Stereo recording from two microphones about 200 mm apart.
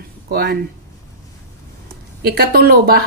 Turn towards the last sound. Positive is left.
turn(degrees=-50)  # may be behind; listen again after turning